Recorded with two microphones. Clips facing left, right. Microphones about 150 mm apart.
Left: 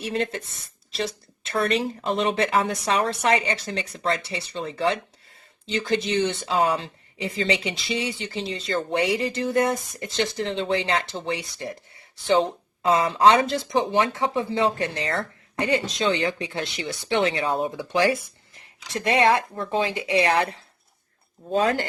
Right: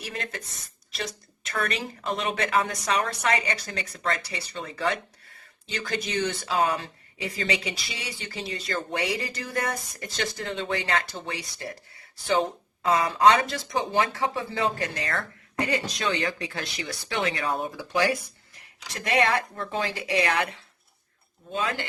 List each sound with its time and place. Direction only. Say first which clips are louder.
0.0 s speech: left 9 dB; 30° left (ahead or behind)